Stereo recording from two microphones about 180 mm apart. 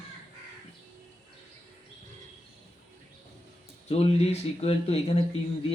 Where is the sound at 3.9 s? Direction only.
35° left (ahead or behind).